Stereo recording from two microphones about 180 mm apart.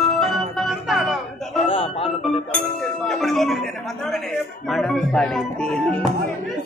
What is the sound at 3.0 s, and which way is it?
Music, centre (ahead or behind).